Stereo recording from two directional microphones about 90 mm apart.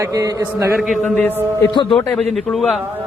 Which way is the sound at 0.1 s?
40° right (ahead or behind).